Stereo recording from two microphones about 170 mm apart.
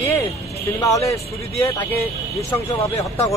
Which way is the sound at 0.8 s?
20° left (ahead or behind).